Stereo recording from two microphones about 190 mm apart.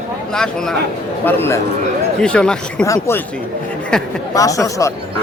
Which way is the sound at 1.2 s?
10° left (ahead or behind).